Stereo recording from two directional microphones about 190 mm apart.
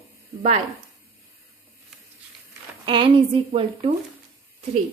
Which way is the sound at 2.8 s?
25° right (ahead or behind).